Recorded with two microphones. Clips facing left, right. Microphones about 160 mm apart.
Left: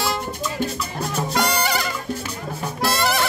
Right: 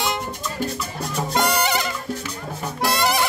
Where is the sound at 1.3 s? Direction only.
20° right (ahead or behind).